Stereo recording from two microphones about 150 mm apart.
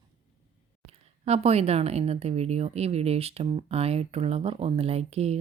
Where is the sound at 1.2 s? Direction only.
45° right (ahead or behind).